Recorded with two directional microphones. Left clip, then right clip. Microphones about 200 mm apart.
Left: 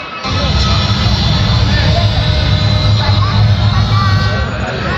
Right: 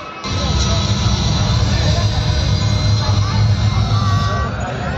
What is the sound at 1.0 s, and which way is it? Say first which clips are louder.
Vehicle: left 5 dB; 35° left (ahead or behind).